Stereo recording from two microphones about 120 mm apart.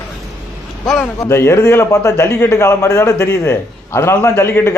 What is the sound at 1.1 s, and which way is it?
A man's voice, 25° left (ahead or behind).